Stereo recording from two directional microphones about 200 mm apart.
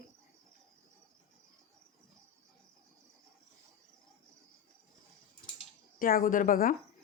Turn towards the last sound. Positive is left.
turn(degrees=45)  # may be behind; listen again after turning